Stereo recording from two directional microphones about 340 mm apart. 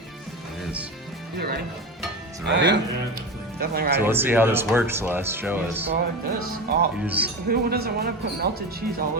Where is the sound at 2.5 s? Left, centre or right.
Right.